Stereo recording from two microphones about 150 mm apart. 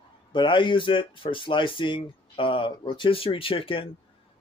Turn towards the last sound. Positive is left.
turn(degrees=35)  # may be behind; listen again after turning